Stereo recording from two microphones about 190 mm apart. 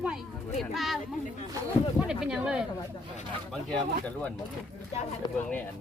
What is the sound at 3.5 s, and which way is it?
Speech, 5° left (ahead or behind).